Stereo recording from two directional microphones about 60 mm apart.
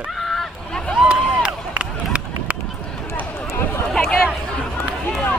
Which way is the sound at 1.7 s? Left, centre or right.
Right.